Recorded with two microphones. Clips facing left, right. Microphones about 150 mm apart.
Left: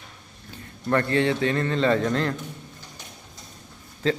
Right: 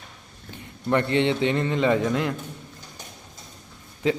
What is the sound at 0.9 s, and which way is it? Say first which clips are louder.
A man's voice: even; 20° right (ahead or behind).